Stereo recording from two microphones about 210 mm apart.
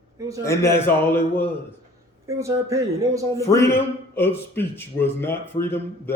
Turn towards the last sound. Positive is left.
turn(degrees=10)  # may be behind; listen again after turning